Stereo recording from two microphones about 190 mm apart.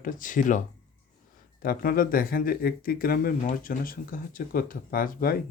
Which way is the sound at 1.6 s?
50° left (ahead or behind).